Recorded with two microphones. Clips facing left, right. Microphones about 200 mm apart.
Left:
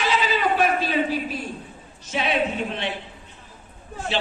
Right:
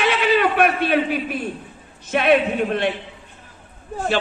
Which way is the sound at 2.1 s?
55° right (ahead or behind).